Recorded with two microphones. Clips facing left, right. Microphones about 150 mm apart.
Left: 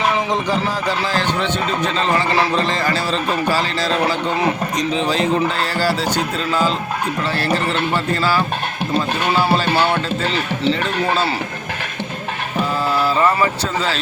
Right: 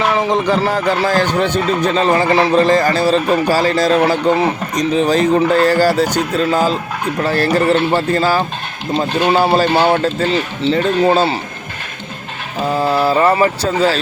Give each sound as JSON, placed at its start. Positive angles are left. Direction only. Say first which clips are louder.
{"t": 0.4, "sound": "speech", "louder": "right 5 dB", "side_deg": -55}
{"t": 2.1, "sound": "speech", "louder": "right 5 dB", "side_deg": -25}
{"t": 2.6, "sound": "speech", "louder": "right 7 dB", "side_deg": -45}
{"t": 13.1, "sound": "speech", "louder": "right 4 dB", "side_deg": -40}